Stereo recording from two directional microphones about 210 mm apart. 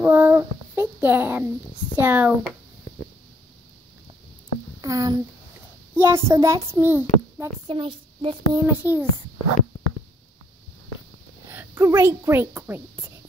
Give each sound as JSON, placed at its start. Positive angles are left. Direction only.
{"t": 0.0, "sound": "a child's voice", "side_deg": -10}
{"t": 4.8, "sound": "a child's voice", "side_deg": -15}
{"t": 7.6, "sound": "a child's voice", "side_deg": -25}
{"t": 8.6, "sound": "a child's voice", "side_deg": -10}
{"t": 11.4, "sound": "a child's voice", "side_deg": -10}